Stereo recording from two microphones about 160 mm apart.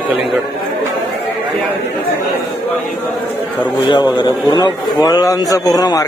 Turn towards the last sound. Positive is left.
turn(degrees=20)  # may be behind; listen again after turning